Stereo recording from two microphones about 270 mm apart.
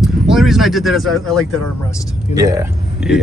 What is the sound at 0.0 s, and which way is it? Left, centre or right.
Speech, centre.